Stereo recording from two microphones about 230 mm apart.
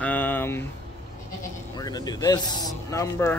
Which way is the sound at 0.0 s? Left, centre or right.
Centre.